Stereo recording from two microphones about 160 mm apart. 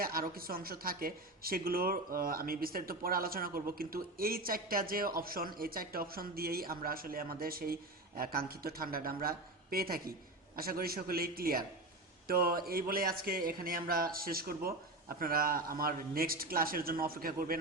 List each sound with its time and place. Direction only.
0.0 s a man's voice: 65° right (ahead or behind)